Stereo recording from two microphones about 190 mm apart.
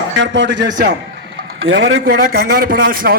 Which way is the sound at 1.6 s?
85° right.